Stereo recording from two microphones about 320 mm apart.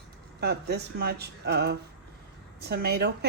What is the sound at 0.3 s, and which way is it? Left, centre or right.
A woman's voice, right.